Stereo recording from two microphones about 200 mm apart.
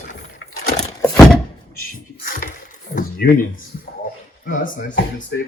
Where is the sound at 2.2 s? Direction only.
45° left (ahead or behind).